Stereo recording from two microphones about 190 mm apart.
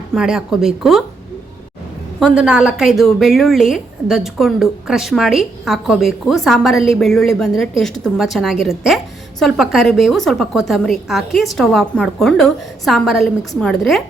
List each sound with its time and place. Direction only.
0.1 s a woman's voice: 5° right (ahead or behind)
2.1 s a woman's voice: 5° right (ahead or behind)